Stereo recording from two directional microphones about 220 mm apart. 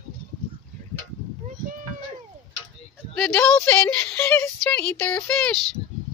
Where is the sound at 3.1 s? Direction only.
5° left (ahead or behind).